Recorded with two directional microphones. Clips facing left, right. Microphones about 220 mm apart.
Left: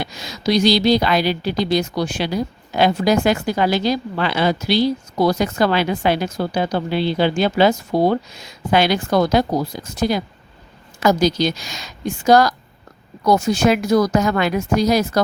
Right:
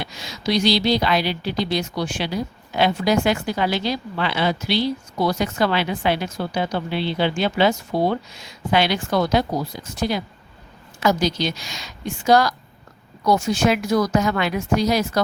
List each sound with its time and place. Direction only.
0.0 s a woman's voice: 40° left (ahead or behind)